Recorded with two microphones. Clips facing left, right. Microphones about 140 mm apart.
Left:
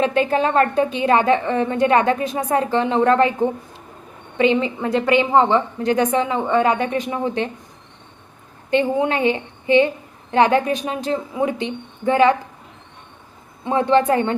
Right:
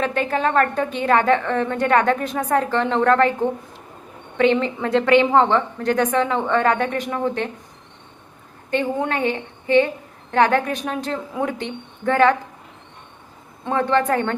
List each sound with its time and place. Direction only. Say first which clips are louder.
0.0 s a woman's voice: left 3 dB; 20° left (ahead or behind)
8.7 s a woman's voice: left 4 dB; 20° left (ahead or behind)
13.7 s a woman's voice: left 3 dB; 20° left (ahead or behind)